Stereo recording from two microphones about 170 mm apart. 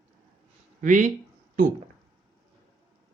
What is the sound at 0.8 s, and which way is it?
Speech, 50° right (ahead or behind).